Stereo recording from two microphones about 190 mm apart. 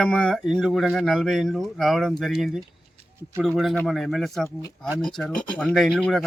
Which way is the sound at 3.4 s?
Centre (ahead or behind).